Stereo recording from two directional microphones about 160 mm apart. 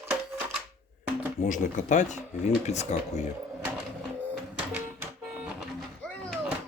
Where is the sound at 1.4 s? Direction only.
50° left (ahead or behind).